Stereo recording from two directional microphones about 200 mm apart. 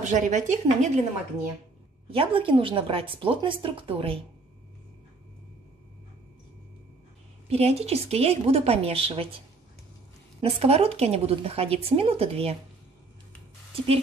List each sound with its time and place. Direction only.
0.0 s a woman's voice: 35° right (ahead or behind)
2.0 s speech: 25° right (ahead or behind)
7.4 s a woman's voice: 30° right (ahead or behind)
10.4 s a woman's voice: 30° right (ahead or behind)